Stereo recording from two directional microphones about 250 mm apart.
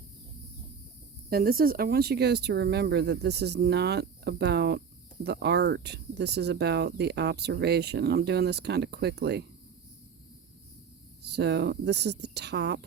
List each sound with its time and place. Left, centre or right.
1.3 s speech: right
11.3 s speech: right